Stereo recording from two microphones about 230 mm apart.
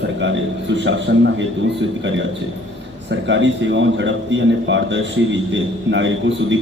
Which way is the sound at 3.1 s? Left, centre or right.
Right.